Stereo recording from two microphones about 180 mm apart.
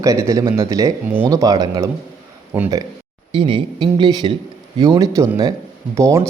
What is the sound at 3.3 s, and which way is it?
A man's voice, 25° right (ahead or behind).